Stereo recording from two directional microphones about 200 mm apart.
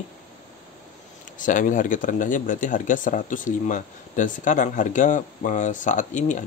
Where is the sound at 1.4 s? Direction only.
40° left (ahead or behind).